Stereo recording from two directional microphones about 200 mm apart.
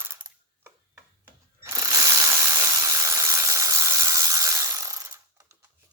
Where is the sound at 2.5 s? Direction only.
15° right (ahead or behind).